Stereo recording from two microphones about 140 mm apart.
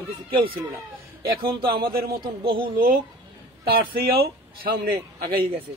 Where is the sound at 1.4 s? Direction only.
90° right.